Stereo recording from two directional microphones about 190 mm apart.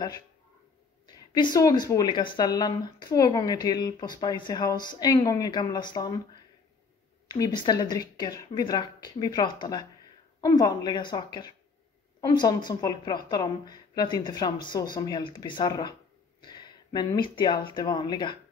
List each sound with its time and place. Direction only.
1.0 s speech: 20° left (ahead or behind)
16.3 s a sound: 25° left (ahead or behind)
17.4 s speech: 25° left (ahead or behind)